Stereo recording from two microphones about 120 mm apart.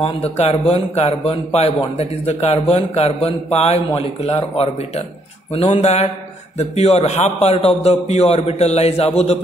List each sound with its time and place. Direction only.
0.0 s a man's voice: 55° left (ahead or behind)